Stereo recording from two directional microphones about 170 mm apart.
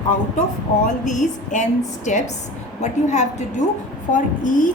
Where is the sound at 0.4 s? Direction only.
50° left (ahead or behind).